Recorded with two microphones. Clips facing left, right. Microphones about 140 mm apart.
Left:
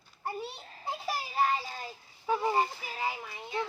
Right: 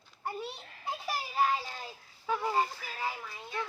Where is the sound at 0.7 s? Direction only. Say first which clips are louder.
Left 1 dB; 30° left (ahead or behind).